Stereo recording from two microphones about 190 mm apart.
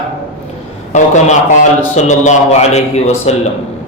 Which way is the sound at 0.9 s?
40° left (ahead or behind).